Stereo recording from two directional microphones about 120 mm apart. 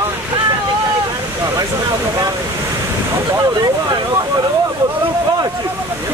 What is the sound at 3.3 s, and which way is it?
Speech, 35° right (ahead or behind).